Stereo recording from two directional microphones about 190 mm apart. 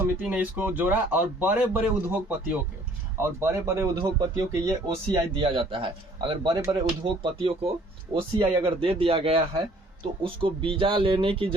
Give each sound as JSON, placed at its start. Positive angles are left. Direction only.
{"t": 0.0, "sound": "speech", "side_deg": -10}